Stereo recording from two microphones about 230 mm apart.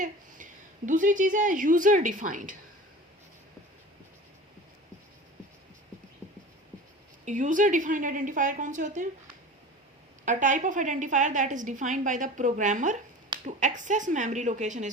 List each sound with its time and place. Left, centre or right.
0.9 s a woman's voice: right
7.3 s a woman's voice: right
10.2 s a woman's voice: right